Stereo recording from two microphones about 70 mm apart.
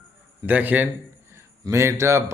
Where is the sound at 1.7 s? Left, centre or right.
Right.